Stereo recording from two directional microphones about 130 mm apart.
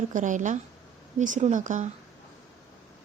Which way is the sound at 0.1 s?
80° right.